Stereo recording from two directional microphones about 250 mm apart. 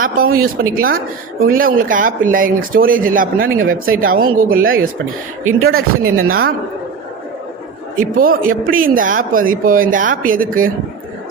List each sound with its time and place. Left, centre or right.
0.3 s speech: right
5.5 s speech: right
6.2 s speech: right
7.9 s speech: right